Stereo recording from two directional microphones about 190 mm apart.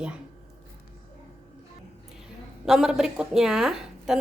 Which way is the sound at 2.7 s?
5° right (ahead or behind).